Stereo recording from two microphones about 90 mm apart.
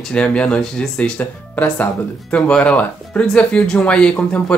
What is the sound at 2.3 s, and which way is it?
Speech, 10° left (ahead or behind).